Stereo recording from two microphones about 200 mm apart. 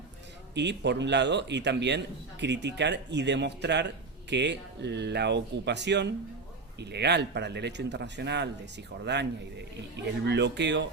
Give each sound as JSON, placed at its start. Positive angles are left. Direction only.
{"t": 0.5, "sound": "a man's voice", "side_deg": -60}
{"t": 10.2, "sound": "a man's voice", "side_deg": -60}